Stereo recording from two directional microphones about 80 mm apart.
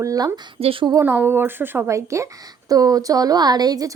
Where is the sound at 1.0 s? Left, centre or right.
Right.